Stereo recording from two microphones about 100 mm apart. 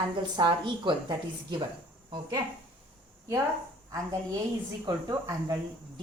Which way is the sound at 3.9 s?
35° right (ahead or behind).